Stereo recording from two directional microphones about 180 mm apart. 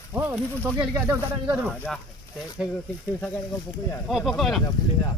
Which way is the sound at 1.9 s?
Centre (ahead or behind).